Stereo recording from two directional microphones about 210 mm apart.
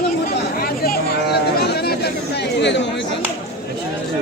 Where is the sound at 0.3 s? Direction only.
45° left (ahead or behind).